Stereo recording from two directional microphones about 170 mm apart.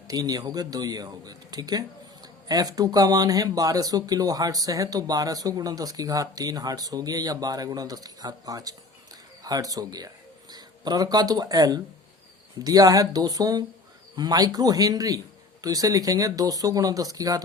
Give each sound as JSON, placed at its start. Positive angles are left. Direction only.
{"t": 0.1, "sound": "speech", "side_deg": -20}